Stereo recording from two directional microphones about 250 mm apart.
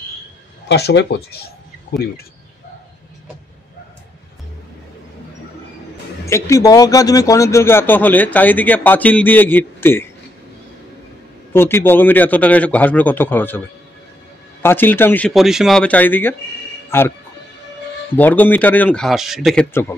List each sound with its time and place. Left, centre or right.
0.7 s speech: left
6.2 s speech: centre
11.5 s speech: centre
14.6 s speech: centre
18.1 s speech: centre